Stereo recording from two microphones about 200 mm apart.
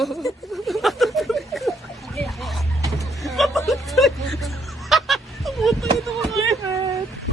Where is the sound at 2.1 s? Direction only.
Centre (ahead or behind).